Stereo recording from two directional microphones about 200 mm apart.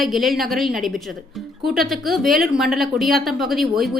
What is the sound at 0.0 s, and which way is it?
A woman's voice, centre (ahead or behind).